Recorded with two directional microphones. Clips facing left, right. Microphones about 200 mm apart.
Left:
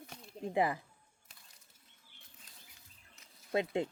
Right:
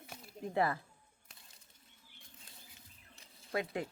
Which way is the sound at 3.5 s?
25° left (ahead or behind).